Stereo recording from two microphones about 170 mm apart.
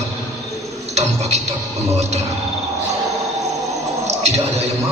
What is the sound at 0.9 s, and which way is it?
Speech, 40° right (ahead or behind).